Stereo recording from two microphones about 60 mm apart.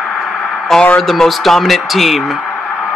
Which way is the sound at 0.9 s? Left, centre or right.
Centre.